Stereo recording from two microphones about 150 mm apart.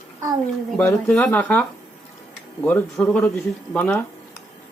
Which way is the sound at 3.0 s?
10° left (ahead or behind).